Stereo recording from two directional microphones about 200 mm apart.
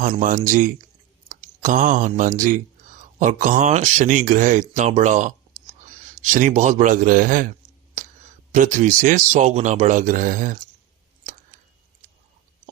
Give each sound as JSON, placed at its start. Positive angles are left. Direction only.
{"t": 0.0, "sound": "speech", "side_deg": -40}
{"t": 6.3, "sound": "speech", "side_deg": -40}
{"t": 8.0, "sound": "a sound", "side_deg": -40}
{"t": 8.5, "sound": "speech", "side_deg": -40}